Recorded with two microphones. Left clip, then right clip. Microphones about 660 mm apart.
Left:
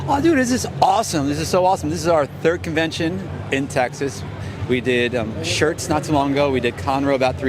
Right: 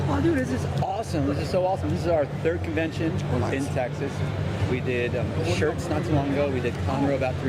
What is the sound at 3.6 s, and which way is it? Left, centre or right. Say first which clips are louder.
Speech: left 7 dB; left.